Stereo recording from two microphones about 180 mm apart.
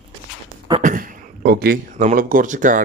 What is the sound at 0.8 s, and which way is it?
A man's voice, 45° right (ahead or behind).